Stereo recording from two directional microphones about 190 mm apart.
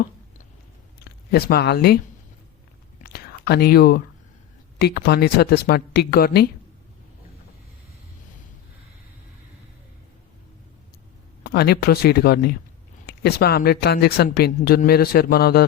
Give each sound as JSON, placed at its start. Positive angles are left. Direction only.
{"t": 0.9, "sound": "speech", "side_deg": 55}
{"t": 3.0, "sound": "whispering", "side_deg": 55}
{"t": 4.8, "sound": "speech", "side_deg": 60}
{"t": 11.4, "sound": "speech", "side_deg": 55}